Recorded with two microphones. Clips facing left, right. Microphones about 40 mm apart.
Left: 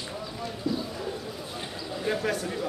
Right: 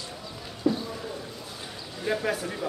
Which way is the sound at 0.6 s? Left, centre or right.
Right.